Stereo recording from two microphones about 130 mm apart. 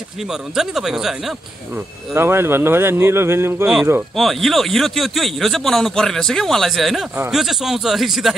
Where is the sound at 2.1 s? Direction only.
20° right (ahead or behind).